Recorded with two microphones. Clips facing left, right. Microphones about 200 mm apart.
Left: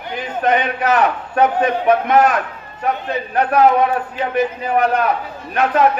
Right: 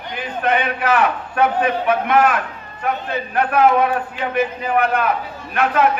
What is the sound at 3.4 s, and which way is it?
A man's voice, 40° left (ahead or behind).